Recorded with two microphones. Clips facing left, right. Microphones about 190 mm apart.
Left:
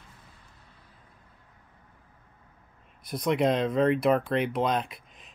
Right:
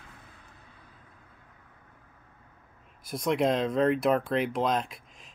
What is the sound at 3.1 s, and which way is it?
Speech, centre (ahead or behind).